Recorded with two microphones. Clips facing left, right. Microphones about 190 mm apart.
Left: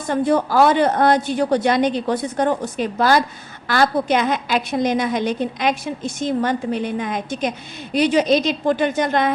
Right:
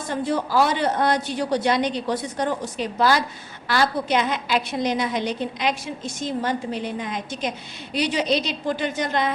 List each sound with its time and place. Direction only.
0.1 s a woman's voice: 55° left (ahead or behind)